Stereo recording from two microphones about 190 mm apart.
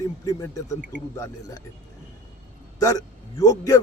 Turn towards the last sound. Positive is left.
turn(degrees=20)  # may be behind; listen again after turning